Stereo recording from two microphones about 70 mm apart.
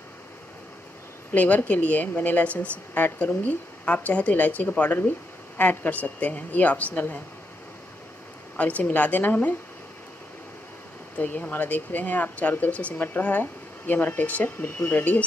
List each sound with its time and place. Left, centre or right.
1.3 s speech: left
8.5 s speech: left
11.1 s speech: left